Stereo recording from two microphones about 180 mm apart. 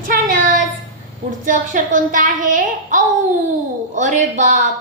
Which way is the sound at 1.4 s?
45° right (ahead or behind).